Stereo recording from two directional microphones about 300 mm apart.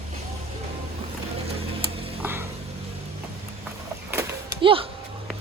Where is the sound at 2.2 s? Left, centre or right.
Centre.